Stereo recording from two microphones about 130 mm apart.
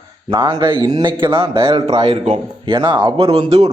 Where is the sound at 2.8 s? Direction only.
35° right (ahead or behind); by 3.7 s 50° right (ahead or behind).